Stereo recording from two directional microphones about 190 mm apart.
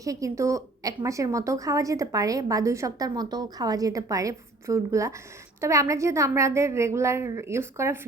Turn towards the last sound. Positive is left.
turn(degrees=-15)  # may be behind; listen again after turning